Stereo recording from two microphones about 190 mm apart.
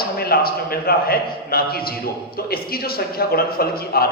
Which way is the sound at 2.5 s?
55° left (ahead or behind).